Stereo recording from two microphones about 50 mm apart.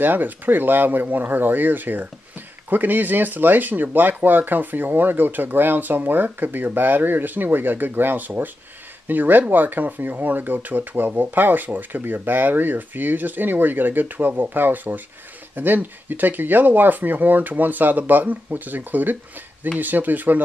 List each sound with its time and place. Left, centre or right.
0.0 s speech: right